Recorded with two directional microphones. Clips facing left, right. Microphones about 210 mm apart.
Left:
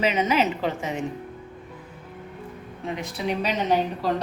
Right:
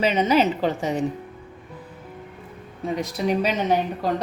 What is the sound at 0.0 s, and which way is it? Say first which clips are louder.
Speech: right 3 dB; 35° right (ahead or behind).